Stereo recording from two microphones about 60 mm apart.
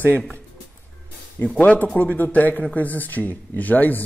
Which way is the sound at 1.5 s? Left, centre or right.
Left.